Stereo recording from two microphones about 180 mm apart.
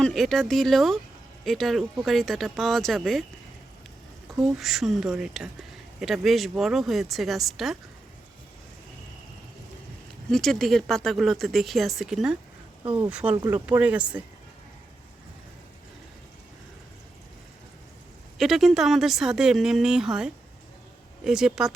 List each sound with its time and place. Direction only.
0.0 s speech: centre (ahead or behind)
4.4 s speech: centre (ahead or behind)
10.2 s speech: centre (ahead or behind)
18.3 s speech: centre (ahead or behind)